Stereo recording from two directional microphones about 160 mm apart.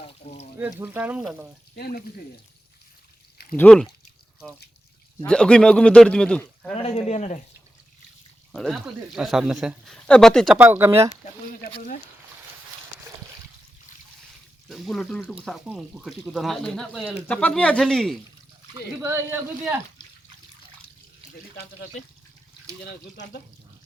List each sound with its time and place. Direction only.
0.0 s a sound: 40° left (ahead or behind)
0.6 s speech: 10° right (ahead or behind)
1.7 s speech: 75° left (ahead or behind)
3.5 s speech: 5° left (ahead or behind)
5.2 s speech: 5° left (ahead or behind)
6.7 s speech: 40° left (ahead or behind)
8.5 s speech: centre (ahead or behind)
10.6 s speech: 15° right (ahead or behind)
11.5 s speech: 60° left (ahead or behind)
14.7 s speech: centre (ahead or behind)
17.2 s speech: 5° left (ahead or behind)
19.0 s speech: 15° right (ahead or behind)